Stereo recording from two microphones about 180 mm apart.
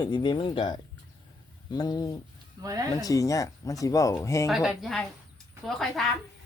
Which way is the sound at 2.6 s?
20° right (ahead or behind).